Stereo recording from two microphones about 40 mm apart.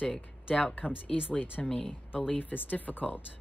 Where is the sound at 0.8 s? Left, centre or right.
Left.